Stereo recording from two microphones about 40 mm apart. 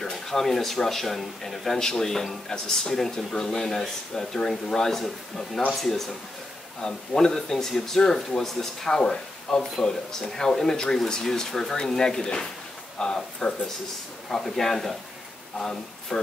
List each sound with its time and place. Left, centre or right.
0.0 s speech: centre